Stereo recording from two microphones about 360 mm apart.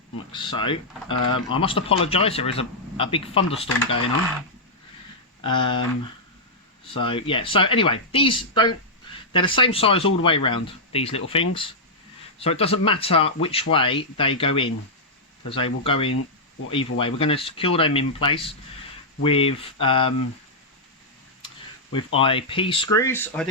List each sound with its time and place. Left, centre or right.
0.3 s speech: centre
1.1 s speech: left
1.5 s speech: centre
5.4 s speech: centre
6.9 s speech: centre
21.9 s speech: centre